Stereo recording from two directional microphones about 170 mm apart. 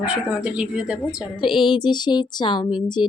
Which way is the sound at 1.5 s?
30° left (ahead or behind).